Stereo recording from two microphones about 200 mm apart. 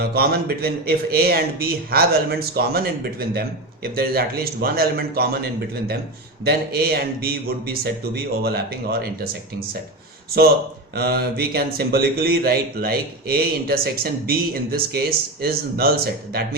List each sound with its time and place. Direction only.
0.0 s speech: 50° right (ahead or behind)
10.9 s speech: 50° right (ahead or behind)